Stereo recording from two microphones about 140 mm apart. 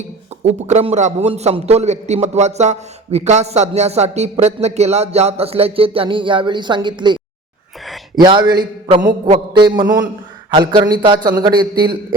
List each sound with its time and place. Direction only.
0.4 s a man's voice: 50° right (ahead or behind); by 7.2 s 35° right (ahead or behind)
8.2 s a man's voice: 35° right (ahead or behind)
9.5 s a sound: 30° right (ahead or behind)
10.5 s a man's voice: 35° right (ahead or behind)